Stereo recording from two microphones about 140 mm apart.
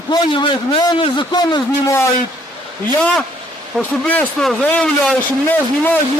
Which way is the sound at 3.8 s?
10° left (ahead or behind).